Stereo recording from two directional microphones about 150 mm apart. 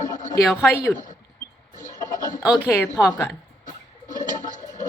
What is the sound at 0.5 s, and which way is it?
Speech, 15° left (ahead or behind).